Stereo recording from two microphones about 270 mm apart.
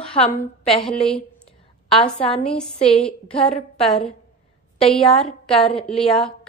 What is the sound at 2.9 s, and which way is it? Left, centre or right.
A woman's voice, centre.